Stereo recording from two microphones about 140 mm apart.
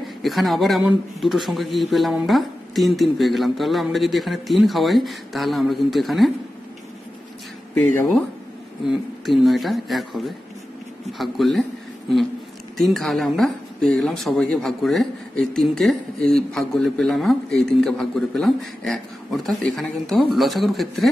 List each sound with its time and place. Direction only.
0.2 s speech: centre (ahead or behind)
7.7 s speech: 15° left (ahead or behind)
8.8 s speech: centre (ahead or behind)
12.7 s speech: centre (ahead or behind)